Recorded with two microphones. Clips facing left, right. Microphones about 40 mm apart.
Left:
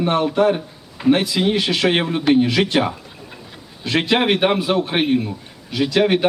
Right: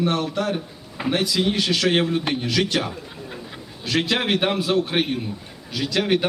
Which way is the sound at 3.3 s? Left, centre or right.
Centre.